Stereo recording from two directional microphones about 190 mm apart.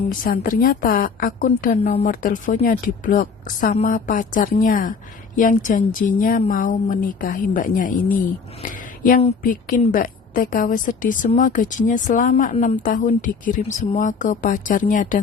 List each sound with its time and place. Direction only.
0.3 s a woman's voice: 50° left (ahead or behind)
2.0 s a woman's voice: 45° left (ahead or behind)